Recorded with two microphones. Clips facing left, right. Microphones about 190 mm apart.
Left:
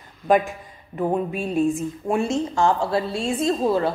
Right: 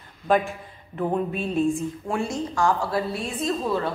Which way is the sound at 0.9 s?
10° left (ahead or behind).